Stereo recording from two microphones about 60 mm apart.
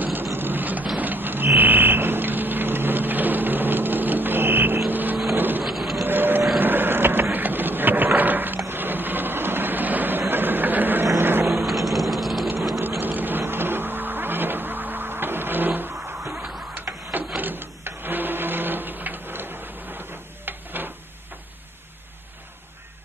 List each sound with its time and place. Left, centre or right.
0.0 s vehicle: right
0.9 s fire alarm: right
4.8 s vehicle: right
5.6 s vehicle: centre
6.0 s vehicle: right
7.3 s a sound: right
11.1 s vehicle: right
11.4 s a sound: centre
13.0 s vehicle: right
16.7 s printer: right